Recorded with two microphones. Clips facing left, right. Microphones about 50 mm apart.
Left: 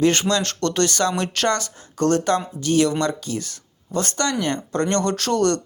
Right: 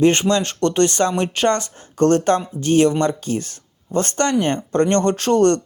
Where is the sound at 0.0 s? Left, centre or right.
Right.